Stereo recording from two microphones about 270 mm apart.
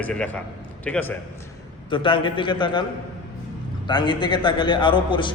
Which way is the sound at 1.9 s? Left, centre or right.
Centre.